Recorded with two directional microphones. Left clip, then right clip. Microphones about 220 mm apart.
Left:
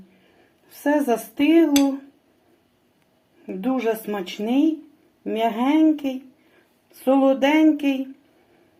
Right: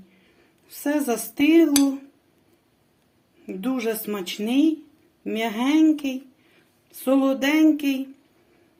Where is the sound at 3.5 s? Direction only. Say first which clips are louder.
Left 3 dB; 15° right (ahead or behind).